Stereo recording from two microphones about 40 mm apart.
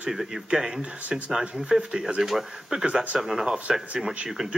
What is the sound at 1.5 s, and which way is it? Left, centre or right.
Speech, centre.